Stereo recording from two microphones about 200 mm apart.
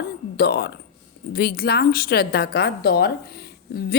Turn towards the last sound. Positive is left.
turn(degrees=50)  # may be behind; listen again after turning